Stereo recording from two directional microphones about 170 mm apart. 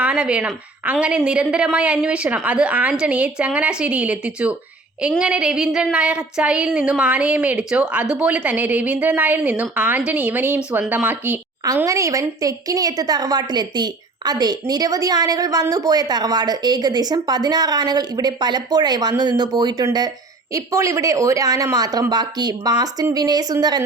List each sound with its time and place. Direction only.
0.0 s child singing: 5° right (ahead or behind)
11.6 s a woman's voice: 20° right (ahead or behind)